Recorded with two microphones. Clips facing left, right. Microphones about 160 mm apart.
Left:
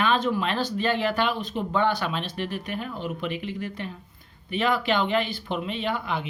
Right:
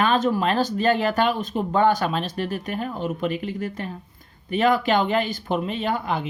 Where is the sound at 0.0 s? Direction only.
45° right (ahead or behind).